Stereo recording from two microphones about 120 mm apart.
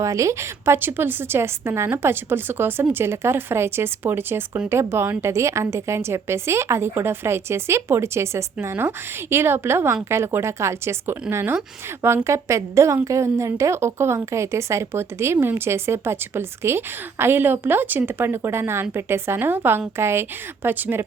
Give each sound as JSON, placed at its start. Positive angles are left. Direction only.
{"t": 0.0, "sound": "a woman's voice", "side_deg": -25}